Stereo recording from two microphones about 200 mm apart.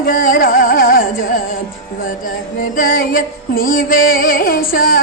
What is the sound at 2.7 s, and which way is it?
Music, 45° left (ahead or behind).